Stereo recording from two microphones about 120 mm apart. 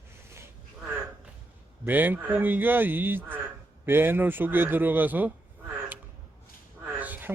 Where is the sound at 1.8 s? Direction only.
15° right (ahead or behind).